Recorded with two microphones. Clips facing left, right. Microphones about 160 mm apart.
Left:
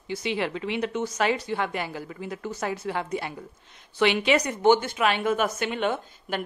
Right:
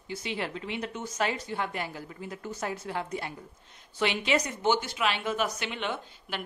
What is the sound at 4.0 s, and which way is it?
A woman's voice, 70° left (ahead or behind).